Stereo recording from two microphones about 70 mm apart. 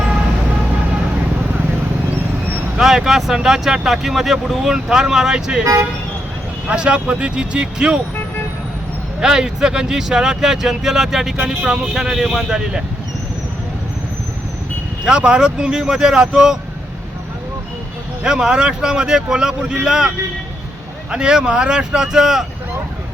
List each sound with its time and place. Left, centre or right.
2.7 s speech: centre
6.7 s speech: centre
9.2 s speech: centre
15.0 s speech: centre
18.2 s speech: centre